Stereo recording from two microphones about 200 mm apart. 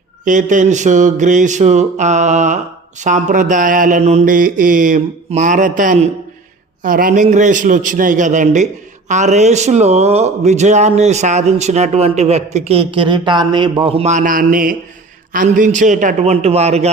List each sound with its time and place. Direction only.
0.3 s speech: 40° right (ahead or behind)